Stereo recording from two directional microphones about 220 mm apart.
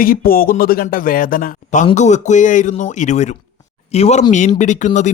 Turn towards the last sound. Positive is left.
turn(degrees=35)  # may be behind; listen again after turning